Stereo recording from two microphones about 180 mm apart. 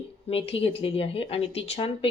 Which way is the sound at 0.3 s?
30° left (ahead or behind).